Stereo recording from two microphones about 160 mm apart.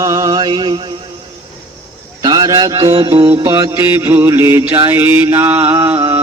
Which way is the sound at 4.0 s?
15° right (ahead or behind).